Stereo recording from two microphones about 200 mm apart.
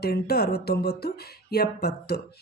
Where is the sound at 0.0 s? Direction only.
50° left (ahead or behind).